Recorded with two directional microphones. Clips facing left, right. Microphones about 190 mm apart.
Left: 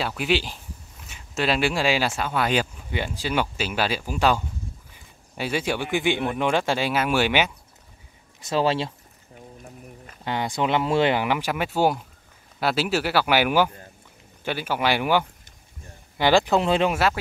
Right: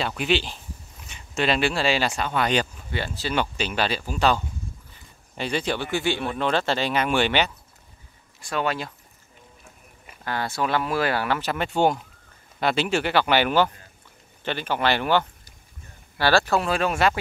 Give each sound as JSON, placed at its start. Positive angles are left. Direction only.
{"t": 0.0, "sound": "speech", "side_deg": 5}
{"t": 8.4, "sound": "speech", "side_deg": 25}
{"t": 10.2, "sound": "speech", "side_deg": 20}
{"t": 16.9, "sound": "speech", "side_deg": 5}